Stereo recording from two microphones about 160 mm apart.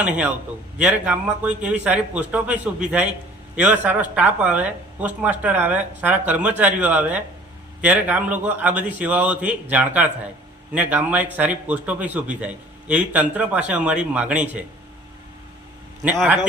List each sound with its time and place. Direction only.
0.0 s a man's voice: 10° right (ahead or behind)
16.1 s a man's voice: 5° right (ahead or behind)